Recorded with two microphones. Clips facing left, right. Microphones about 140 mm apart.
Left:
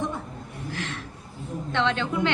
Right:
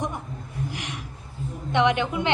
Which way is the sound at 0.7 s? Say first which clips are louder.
Left 2 dB; 15° right (ahead or behind).